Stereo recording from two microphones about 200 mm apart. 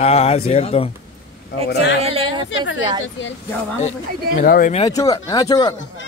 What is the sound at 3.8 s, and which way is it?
Speech, 40° left (ahead or behind).